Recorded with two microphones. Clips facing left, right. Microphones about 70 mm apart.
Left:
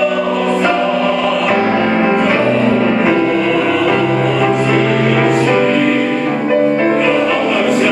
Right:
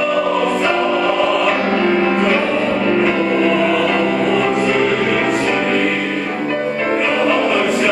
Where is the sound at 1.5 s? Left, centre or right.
Centre.